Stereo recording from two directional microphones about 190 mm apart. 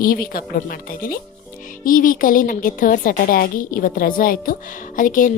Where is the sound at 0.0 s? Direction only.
50° left (ahead or behind).